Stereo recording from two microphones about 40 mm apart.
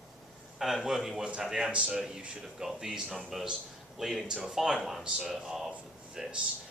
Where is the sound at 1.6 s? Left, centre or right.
Right.